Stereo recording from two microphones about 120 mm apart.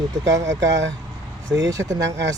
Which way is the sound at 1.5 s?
5° right (ahead or behind).